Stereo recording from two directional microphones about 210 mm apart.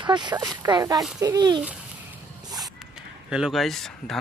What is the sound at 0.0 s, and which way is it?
A child's voice, 20° right (ahead or behind).